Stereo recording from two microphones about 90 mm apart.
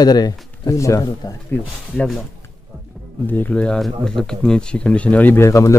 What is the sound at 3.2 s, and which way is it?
Speech, 20° left (ahead or behind).